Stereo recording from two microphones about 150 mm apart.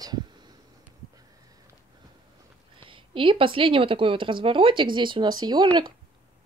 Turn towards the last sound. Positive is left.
turn(degrees=-30)  # may be behind; listen again after turning